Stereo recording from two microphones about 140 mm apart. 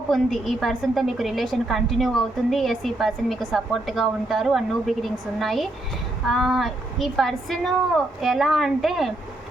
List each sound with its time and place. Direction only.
0.1 s a woman's voice: centre (ahead or behind)